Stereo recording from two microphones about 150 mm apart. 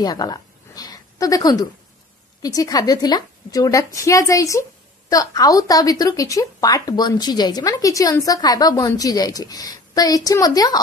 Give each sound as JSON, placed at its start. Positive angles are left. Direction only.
{"t": 0.0, "sound": "a woman's voice", "side_deg": 25}